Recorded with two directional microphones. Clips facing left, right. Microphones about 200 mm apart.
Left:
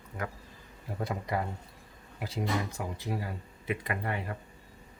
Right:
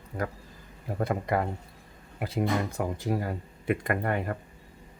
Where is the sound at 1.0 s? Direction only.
55° right (ahead or behind).